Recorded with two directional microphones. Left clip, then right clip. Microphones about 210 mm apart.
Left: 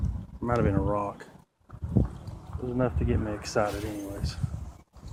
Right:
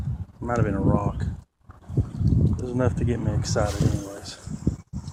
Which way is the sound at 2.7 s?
15° right (ahead or behind).